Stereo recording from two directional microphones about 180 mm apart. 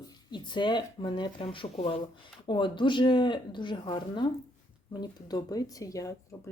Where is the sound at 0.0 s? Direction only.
25° left (ahead or behind).